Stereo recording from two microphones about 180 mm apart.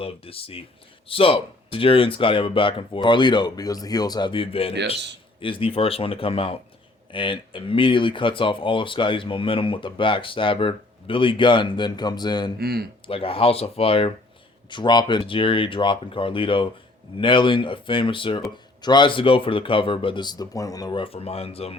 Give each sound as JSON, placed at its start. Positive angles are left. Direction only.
{"t": 0.0, "sound": "speech", "side_deg": 30}
{"t": 12.5, "sound": "speech", "side_deg": -60}
{"t": 13.1, "sound": "speech", "side_deg": 30}